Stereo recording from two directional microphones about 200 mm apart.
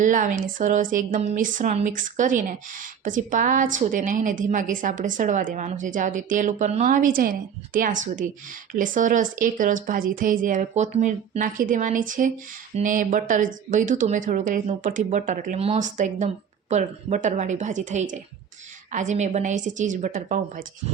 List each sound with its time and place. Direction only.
0.0 s a woman's voice: 40° right (ahead or behind)